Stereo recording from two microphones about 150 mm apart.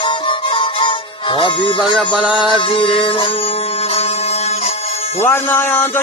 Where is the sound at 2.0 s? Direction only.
10° right (ahead or behind).